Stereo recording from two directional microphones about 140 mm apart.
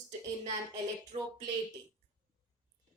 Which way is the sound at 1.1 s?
45° right (ahead or behind).